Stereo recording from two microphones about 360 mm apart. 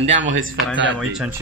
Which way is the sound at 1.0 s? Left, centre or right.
Centre.